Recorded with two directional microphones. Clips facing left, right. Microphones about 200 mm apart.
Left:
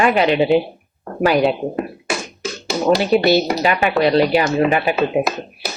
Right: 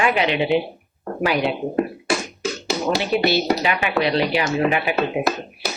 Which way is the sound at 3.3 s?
45° left (ahead or behind).